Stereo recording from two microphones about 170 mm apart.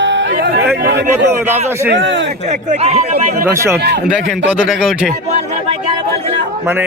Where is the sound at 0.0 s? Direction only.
90° right.